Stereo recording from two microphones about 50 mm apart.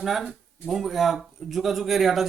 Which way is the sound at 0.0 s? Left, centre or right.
Centre.